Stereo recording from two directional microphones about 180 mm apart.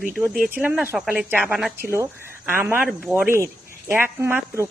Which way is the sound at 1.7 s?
15° right (ahead or behind).